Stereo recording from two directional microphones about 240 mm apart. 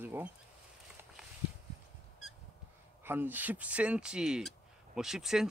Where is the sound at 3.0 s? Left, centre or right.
Centre.